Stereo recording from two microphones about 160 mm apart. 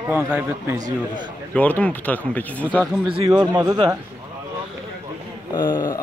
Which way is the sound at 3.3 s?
25° right (ahead or behind).